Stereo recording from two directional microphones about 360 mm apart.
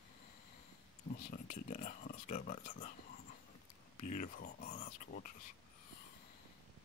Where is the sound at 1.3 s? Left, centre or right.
Centre.